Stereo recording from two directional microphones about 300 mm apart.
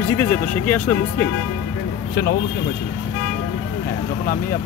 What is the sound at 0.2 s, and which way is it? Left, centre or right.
Speech, centre.